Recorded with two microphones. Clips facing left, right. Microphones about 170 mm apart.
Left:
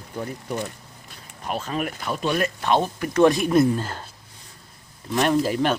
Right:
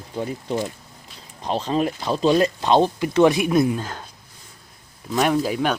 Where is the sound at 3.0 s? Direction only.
15° right (ahead or behind).